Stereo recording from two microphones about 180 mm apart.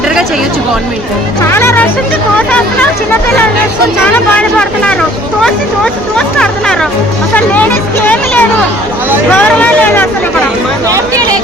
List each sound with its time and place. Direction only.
1.5 s speech: 15° left (ahead or behind)
4.0 s speech: 5° left (ahead or behind)
10.9 s speech: 20° right (ahead or behind)